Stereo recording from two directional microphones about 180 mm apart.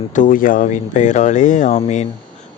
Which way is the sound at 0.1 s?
45° left (ahead or behind).